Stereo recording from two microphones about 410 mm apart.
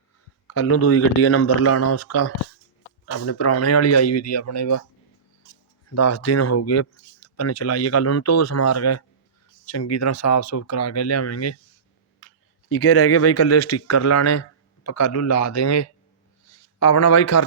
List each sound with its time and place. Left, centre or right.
0.4 s speech: left
5.9 s speech: left
12.6 s speech: left
16.5 s a sound: left